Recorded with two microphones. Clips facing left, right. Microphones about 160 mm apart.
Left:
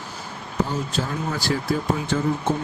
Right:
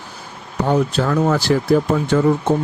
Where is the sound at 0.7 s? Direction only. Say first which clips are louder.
Right 10 dB; 65° right (ahead or behind).